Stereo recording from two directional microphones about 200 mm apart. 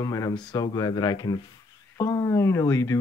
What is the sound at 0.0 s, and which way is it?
Speech, 15° left (ahead or behind).